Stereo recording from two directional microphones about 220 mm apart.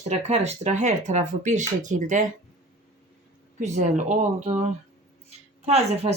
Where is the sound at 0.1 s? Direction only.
30° right (ahead or behind).